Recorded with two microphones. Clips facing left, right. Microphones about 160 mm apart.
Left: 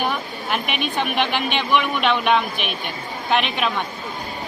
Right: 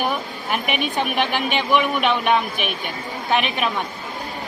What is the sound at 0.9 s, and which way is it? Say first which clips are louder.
A woman's voice: left 2 dB; 5° right (ahead or behind).